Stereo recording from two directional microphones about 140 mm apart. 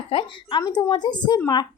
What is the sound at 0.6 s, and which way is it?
Speech, 25° left (ahead or behind).